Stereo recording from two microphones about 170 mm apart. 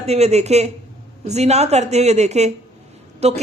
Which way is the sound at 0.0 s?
40° right (ahead or behind).